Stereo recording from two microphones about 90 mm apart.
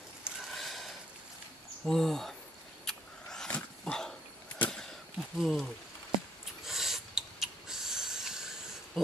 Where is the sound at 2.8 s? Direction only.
5° left (ahead or behind).